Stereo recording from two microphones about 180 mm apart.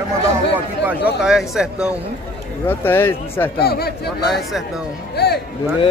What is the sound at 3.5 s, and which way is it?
Speech, 60° left (ahead or behind).